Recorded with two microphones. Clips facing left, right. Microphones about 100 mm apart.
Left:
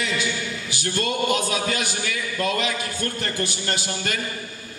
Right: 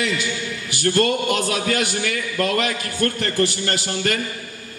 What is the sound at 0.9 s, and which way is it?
A man's voice, 60° right (ahead or behind).